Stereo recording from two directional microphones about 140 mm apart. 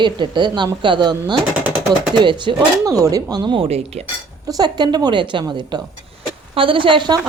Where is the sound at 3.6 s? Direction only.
50° right (ahead or behind).